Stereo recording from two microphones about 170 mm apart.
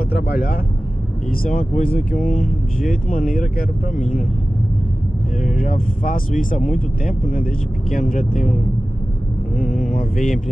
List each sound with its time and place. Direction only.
0.1 s speech: 60° left (ahead or behind)
5.4 s speech: 55° left (ahead or behind)
9.8 s speech: 50° left (ahead or behind)